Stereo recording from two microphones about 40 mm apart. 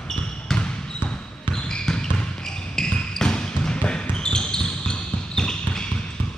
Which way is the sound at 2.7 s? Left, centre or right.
Centre.